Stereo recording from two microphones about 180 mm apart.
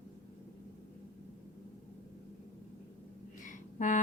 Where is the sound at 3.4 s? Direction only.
45° left (ahead or behind).